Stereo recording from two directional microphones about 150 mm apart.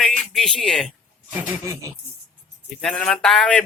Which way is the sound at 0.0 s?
Centre (ahead or behind).